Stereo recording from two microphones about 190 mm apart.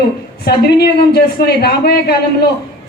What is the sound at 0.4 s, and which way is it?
A woman's voice, 55° left (ahead or behind).